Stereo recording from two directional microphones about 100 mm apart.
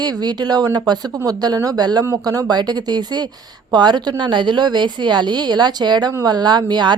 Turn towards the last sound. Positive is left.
turn(degrees=-45)  # may be behind; listen again after turning